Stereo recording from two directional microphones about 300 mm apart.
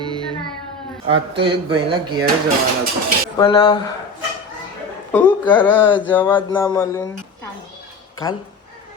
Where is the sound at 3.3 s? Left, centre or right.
Centre.